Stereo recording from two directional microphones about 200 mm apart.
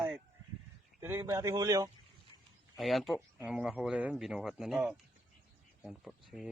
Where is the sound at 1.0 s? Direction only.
15° right (ahead or behind).